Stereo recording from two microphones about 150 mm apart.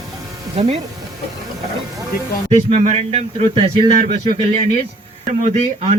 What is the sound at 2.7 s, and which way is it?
Speech, 45° right (ahead or behind).